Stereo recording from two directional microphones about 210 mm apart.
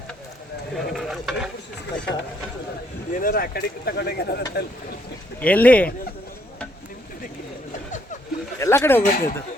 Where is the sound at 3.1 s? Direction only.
40° left (ahead or behind).